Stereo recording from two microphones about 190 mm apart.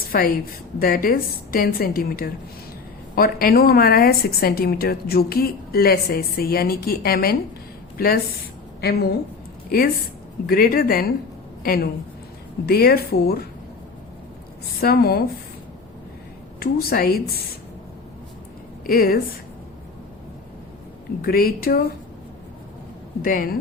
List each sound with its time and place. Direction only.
0.0 s a sound: 50° left (ahead or behind)
0.8 s a woman's voice: 50° left (ahead or behind)
14.8 s speech: 55° left (ahead or behind)
16.6 s a woman's voice: 55° left (ahead or behind)
18.9 s a woman's voice: 50° left (ahead or behind)
21.2 s a woman's voice: 50° left (ahead or behind)
23.2 s a woman's voice: 50° left (ahead or behind)